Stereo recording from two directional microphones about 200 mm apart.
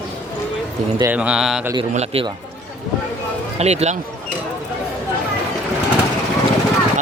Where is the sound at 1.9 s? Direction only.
30° right (ahead or behind).